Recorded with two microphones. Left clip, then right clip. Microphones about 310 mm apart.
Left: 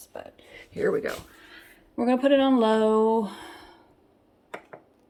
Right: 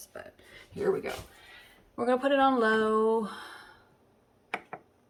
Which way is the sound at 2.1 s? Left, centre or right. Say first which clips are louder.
Left 3 dB; centre.